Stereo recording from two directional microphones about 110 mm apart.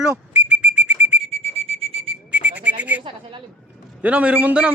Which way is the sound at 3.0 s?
50° right (ahead or behind).